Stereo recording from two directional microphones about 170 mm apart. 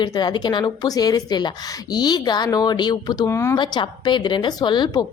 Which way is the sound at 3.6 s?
25° left (ahead or behind).